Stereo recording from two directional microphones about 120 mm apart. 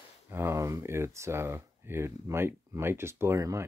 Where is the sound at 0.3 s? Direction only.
20° right (ahead or behind).